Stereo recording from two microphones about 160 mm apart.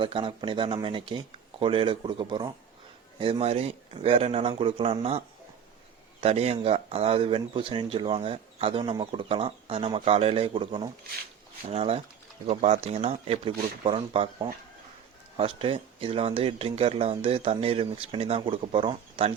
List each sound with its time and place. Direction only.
0.0 s speech: 30° right (ahead or behind)